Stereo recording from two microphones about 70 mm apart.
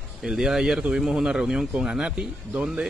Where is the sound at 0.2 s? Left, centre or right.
Centre.